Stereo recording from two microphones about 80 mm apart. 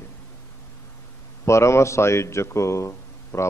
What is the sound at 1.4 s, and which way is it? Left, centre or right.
A man's voice, left.